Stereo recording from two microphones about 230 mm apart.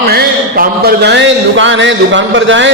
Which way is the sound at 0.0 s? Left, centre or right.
Right.